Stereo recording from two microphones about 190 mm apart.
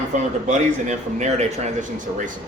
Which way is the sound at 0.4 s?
40° right (ahead or behind).